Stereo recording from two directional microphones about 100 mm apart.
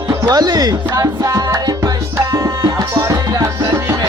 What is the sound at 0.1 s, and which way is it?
Music, 40° right (ahead or behind).